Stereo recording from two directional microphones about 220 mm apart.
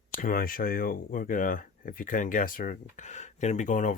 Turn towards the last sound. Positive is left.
turn(degrees=35)  # may be behind; listen again after turning